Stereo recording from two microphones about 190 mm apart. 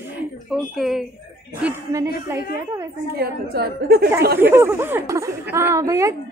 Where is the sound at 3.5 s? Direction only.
55° right (ahead or behind).